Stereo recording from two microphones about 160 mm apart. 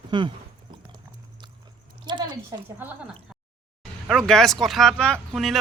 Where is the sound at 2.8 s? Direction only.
10° right (ahead or behind).